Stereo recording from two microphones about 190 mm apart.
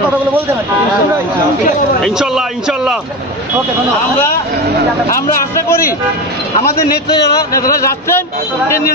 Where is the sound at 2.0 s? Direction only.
5° right (ahead or behind).